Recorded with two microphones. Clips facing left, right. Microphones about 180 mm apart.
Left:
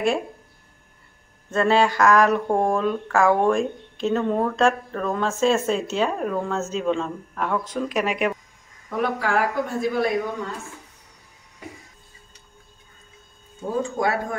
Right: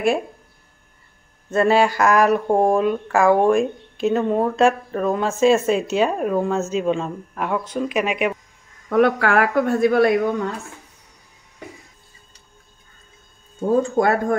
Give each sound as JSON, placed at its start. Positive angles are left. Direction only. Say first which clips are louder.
{"t": 1.5, "sound": "speech", "louder": "right 3 dB", "side_deg": -10}
{"t": 8.8, "sound": "a woman's voice", "louder": "right 8 dB", "side_deg": -65}
{"t": 13.9, "sound": "speech", "louder": "right 5 dB", "side_deg": -50}